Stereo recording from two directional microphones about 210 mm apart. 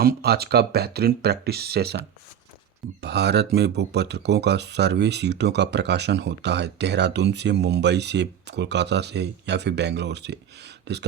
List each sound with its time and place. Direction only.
0.0 s speech: 45° right (ahead or behind)
3.0 s speech: 50° right (ahead or behind)